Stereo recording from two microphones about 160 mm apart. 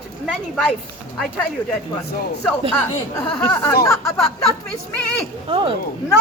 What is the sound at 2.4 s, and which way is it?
Speech, 10° left (ahead or behind).